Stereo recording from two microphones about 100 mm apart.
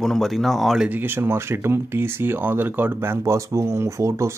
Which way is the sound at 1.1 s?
25° right (ahead or behind).